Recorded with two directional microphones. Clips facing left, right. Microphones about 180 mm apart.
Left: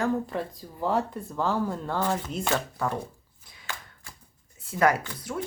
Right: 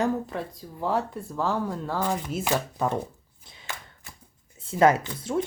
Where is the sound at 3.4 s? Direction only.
25° right (ahead or behind).